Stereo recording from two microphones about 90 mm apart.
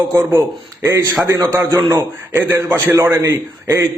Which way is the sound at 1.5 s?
30° right (ahead or behind).